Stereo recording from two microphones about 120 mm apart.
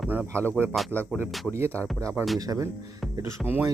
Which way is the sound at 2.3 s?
30° right (ahead or behind).